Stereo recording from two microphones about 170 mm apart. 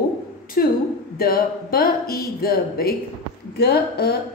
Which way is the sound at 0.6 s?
60° left (ahead or behind).